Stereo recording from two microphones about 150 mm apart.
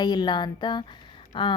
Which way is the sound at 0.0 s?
30° left (ahead or behind).